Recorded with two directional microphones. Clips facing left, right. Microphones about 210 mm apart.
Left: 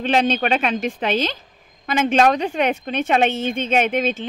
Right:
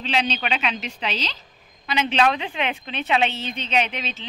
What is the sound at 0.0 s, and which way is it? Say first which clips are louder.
A woman's voice: left 7 dB; 50° left (ahead or behind).